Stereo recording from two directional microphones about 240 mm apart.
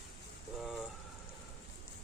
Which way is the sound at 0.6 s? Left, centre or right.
Centre.